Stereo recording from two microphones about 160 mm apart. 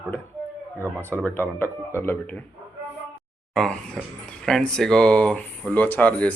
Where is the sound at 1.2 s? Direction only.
15° left (ahead or behind).